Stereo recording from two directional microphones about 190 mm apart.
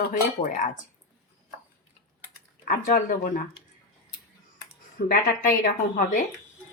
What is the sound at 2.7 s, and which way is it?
Speech, 45° left (ahead or behind).